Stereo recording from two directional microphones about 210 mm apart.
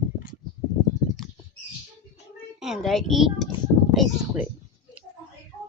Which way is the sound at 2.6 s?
Centre (ahead or behind).